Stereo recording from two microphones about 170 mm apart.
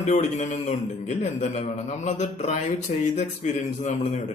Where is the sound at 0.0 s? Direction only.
50° left (ahead or behind).